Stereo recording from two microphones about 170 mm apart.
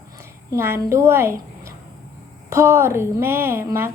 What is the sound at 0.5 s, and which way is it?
Speech, 15° right (ahead or behind).